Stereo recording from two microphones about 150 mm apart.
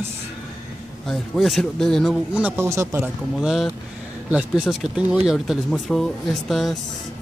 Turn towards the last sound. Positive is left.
turn(degrees=0)  # may be behind; listen again after turning